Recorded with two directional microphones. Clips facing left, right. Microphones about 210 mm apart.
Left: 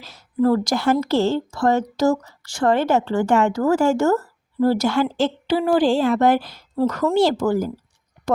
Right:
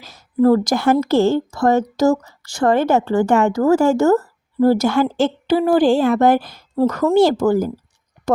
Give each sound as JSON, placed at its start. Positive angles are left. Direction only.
{"t": 0.0, "sound": "a woman's voice", "side_deg": -45}